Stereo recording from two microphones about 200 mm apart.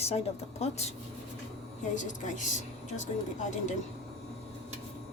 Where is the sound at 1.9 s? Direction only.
40° left (ahead or behind).